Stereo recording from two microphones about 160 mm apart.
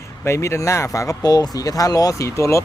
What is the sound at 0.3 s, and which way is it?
Speech, 15° left (ahead or behind).